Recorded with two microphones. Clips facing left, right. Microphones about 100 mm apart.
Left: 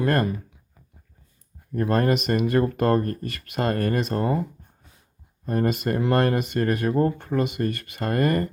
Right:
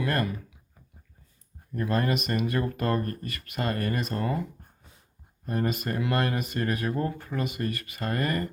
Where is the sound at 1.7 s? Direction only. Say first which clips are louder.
Left 5 dB; 45° left (ahead or behind).